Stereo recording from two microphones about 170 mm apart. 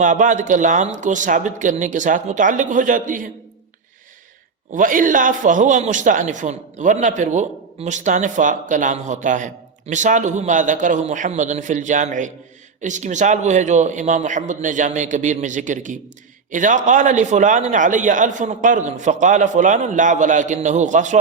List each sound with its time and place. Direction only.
0.0 s a man's voice: 50° right (ahead or behind)
4.7 s a man's voice: 50° right (ahead or behind)